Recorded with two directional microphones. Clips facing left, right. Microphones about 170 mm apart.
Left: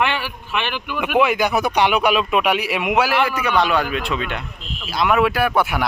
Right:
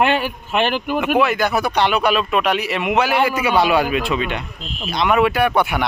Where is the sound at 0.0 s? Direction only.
45° right (ahead or behind).